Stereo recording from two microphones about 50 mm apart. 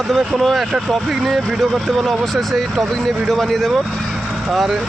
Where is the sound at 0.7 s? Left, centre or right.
Centre.